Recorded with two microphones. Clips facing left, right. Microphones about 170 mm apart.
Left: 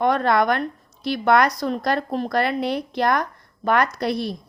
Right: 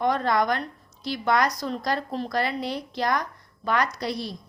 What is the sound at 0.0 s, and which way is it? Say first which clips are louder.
A woman's voice: left 4 dB; 65° left (ahead or behind).